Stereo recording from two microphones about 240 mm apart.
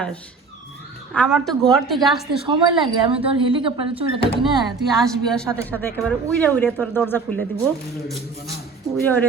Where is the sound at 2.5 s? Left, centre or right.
Right.